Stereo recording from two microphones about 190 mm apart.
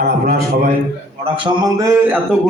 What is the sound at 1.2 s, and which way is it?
Speech, 25° right (ahead or behind).